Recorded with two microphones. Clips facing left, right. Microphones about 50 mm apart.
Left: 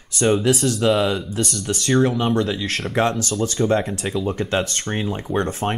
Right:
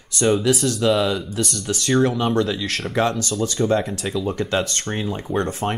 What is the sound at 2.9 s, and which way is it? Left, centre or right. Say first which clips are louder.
Speech: left 1 dB; left.